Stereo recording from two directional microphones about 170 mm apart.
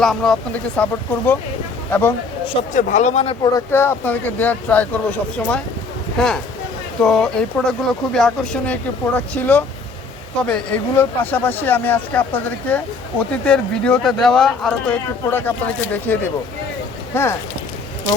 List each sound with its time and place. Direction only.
0.0 s speech: centre (ahead or behind)
2.7 s speech: 50° left (ahead or behind)
3.4 s speech: 15° left (ahead or behind)